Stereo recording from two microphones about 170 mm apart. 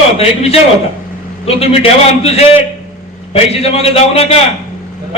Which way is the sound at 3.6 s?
35° left (ahead or behind).